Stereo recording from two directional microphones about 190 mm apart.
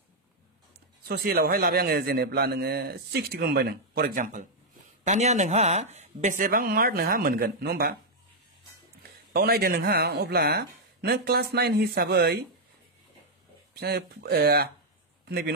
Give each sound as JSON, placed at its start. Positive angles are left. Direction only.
{"t": 1.0, "sound": "a man's voice", "side_deg": -55}
{"t": 9.3, "sound": "a man's voice", "side_deg": -55}
{"t": 13.7, "sound": "a man's voice", "side_deg": -55}